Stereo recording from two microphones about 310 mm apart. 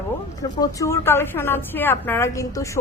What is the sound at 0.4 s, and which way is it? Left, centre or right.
A woman's voice, centre.